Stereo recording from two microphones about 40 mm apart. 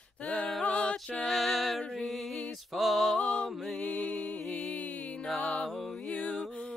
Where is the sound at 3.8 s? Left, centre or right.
Left.